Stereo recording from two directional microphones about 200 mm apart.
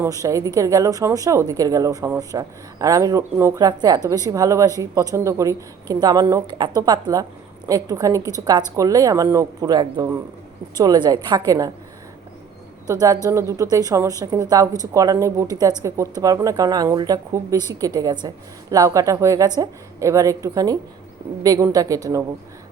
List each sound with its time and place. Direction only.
0.0 s a woman's voice: 15° right (ahead or behind)
12.9 s a woman's voice: 20° right (ahead or behind)